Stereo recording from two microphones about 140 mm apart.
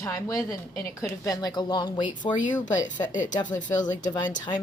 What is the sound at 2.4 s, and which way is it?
Speech, 65° left (ahead or behind).